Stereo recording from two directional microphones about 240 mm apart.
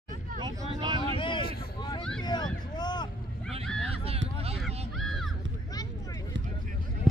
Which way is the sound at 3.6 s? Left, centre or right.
Centre.